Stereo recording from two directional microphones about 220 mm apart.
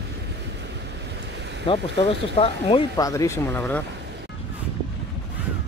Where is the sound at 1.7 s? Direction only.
25° left (ahead or behind); by 3.8 s 10° left (ahead or behind).